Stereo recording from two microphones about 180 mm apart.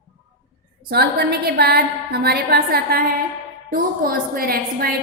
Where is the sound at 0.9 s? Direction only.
60° right (ahead or behind).